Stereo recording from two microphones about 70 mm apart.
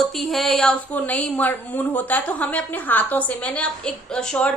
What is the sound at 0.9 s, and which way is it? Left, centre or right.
A woman's voice, left.